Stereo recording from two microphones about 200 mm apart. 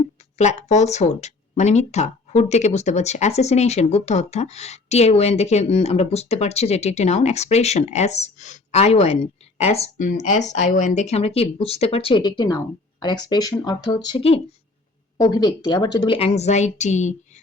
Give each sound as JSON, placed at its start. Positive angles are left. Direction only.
{"t": 0.0, "sound": "a woman's voice", "side_deg": 35}